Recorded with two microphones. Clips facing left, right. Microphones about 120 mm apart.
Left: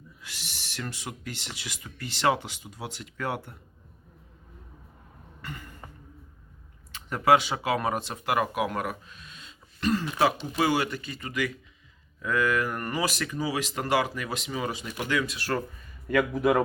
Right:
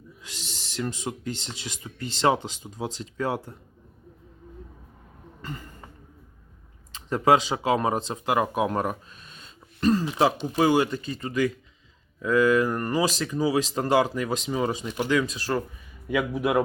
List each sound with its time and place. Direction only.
0.2 s speech: 20° right (ahead or behind)
7.1 s speech: 25° right (ahead or behind)
10.1 s speech: 25° right (ahead or behind)
10.3 s speech: 40° right (ahead or behind)
10.8 s speech: 30° right (ahead or behind)
12.2 s speech: 15° right (ahead or behind)
12.5 s speech: 30° right (ahead or behind)
16.0 s a man's voice: 5° right (ahead or behind)